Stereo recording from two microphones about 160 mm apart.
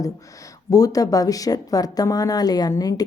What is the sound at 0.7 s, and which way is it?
Speech, 20° left (ahead or behind).